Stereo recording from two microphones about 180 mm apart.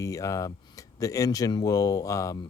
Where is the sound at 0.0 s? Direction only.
20° left (ahead or behind).